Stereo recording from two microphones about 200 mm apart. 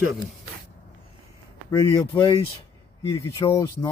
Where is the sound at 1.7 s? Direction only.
20° left (ahead or behind).